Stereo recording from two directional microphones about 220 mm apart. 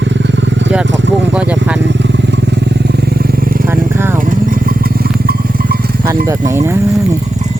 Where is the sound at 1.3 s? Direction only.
5° right (ahead or behind).